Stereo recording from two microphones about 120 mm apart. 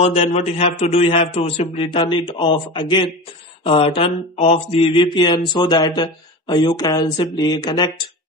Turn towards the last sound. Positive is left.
turn(degrees=35)  # may be behind; listen again after turning